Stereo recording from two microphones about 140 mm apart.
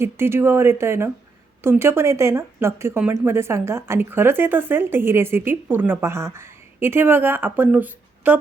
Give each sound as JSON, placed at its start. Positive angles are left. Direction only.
{"t": 0.0, "sound": "speech", "side_deg": -15}